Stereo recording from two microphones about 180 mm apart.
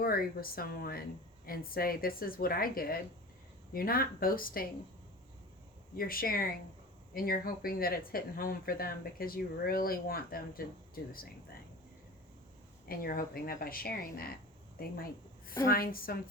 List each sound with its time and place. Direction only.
0.0 s speech: 55° left (ahead or behind)
6.0 s a woman's voice: 55° left (ahead or behind)
12.9 s a woman's voice: 55° left (ahead or behind)